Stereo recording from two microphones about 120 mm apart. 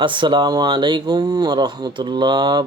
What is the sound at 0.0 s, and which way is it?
Speech, 45° right (ahead or behind).